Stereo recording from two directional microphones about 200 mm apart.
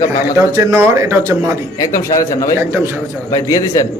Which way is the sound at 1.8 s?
15° left (ahead or behind).